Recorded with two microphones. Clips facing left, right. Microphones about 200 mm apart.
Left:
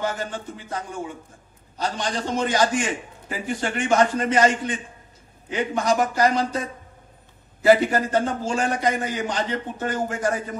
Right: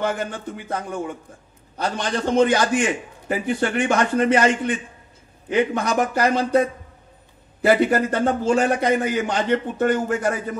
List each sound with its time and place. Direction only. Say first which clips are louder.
0.0 s a man's voice: right 3 dB; 60° right (ahead or behind)